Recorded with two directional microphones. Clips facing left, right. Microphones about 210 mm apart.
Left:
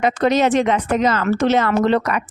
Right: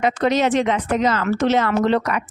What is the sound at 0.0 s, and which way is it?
Speech, 45° left (ahead or behind).